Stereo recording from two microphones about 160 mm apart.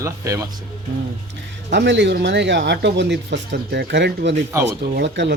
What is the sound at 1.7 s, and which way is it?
Speech, 90° right.